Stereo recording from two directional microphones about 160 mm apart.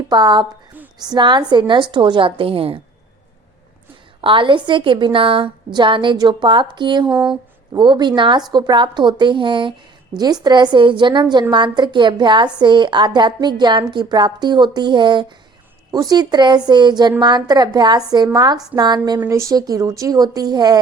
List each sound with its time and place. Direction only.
0.1 s a woman's voice: 25° right (ahead or behind)
4.2 s a woman's voice: 30° right (ahead or behind)
7.1 s speech: 5° right (ahead or behind)
7.7 s a woman's voice: 25° right (ahead or behind)